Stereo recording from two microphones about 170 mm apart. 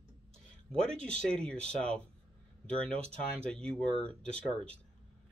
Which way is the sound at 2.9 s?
35° right (ahead or behind).